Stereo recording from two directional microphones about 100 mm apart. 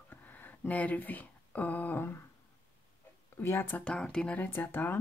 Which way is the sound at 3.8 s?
10° left (ahead or behind).